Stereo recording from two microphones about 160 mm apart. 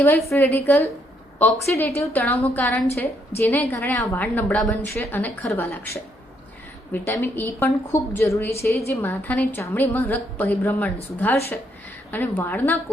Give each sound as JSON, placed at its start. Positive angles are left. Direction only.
{"t": 0.0, "sound": "a woman's voice", "side_deg": 15}